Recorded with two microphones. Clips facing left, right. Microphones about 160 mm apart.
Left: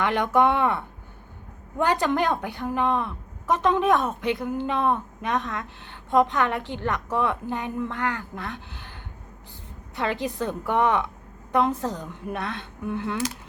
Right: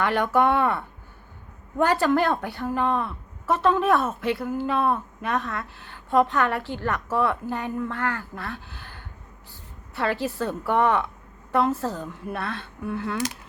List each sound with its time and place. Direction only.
0.0 s a woman's voice: 15° left (ahead or behind)